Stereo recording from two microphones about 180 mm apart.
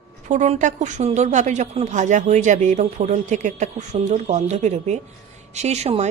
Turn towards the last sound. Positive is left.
turn(degrees=-35)  # may be behind; listen again after turning